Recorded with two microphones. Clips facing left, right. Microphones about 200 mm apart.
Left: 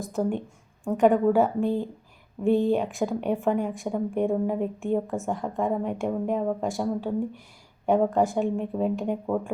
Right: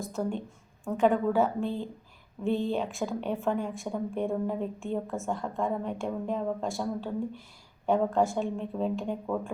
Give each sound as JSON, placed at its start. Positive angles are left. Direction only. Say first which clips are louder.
{"t": 0.1, "sound": "a woman's voice", "louder": "left 8 dB", "side_deg": 15}